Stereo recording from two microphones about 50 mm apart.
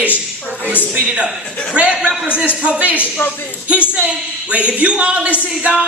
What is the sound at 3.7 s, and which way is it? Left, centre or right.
Speech, right.